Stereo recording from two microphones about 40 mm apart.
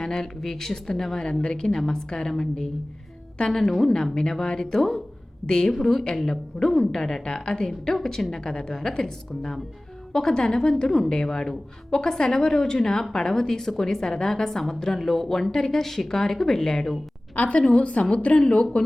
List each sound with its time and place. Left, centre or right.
0.0 s a woman's voice: centre
1.3 s a woman's voice: left
17.3 s a woman's voice: left